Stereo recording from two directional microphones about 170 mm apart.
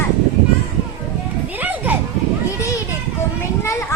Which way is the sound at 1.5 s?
10° right (ahead or behind).